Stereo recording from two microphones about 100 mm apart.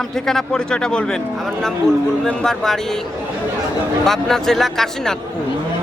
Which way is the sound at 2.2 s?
5° left (ahead or behind).